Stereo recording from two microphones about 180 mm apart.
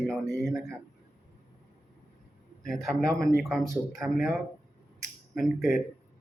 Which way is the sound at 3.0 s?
60° left (ahead or behind).